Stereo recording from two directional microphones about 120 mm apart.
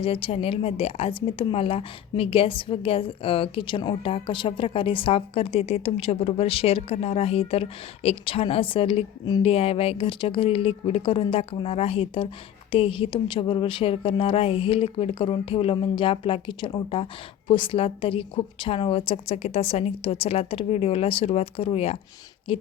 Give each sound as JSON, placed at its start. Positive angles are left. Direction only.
{"t": 0.0, "sound": "a woman's voice", "side_deg": 50}